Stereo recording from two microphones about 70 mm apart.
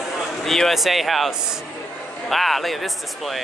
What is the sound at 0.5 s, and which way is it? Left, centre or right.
Speech, centre.